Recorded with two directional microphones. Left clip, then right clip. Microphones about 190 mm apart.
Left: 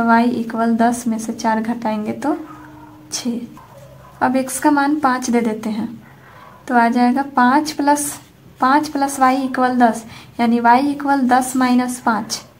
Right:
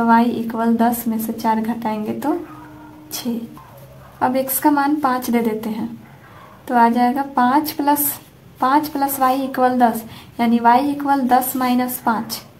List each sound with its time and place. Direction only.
0.0 s a woman's voice: 15° left (ahead or behind)
4.2 s a woman's voice: 15° left (ahead or behind)